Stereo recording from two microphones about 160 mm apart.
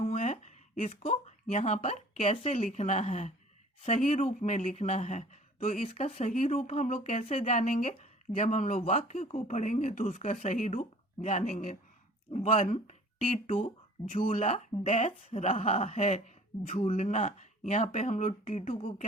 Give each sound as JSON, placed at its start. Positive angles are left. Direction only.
{"t": 0.0, "sound": "a sound", "side_deg": 55}
{"t": 1.1, "sound": "speech", "side_deg": 45}
{"t": 10.4, "sound": "speech", "side_deg": 45}
{"t": 14.1, "sound": "speech", "side_deg": 55}
{"t": 18.7, "sound": "speech", "side_deg": 40}